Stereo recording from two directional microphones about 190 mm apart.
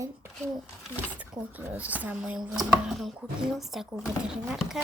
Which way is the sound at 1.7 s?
10° right (ahead or behind).